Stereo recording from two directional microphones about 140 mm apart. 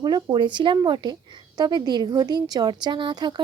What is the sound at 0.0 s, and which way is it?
Speech, 30° right (ahead or behind).